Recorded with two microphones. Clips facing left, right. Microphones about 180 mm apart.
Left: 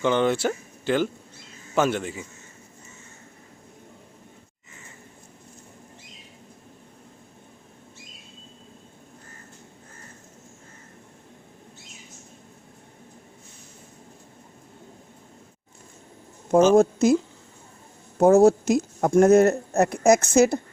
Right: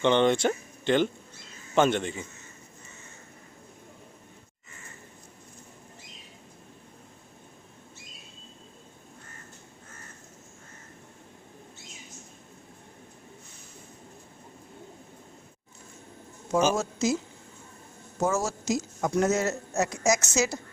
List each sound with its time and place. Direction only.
0.0 s a man's voice: 5° left (ahead or behind)
16.7 s a woman's voice: 55° left (ahead or behind)
18.2 s a woman's voice: 60° left (ahead or behind)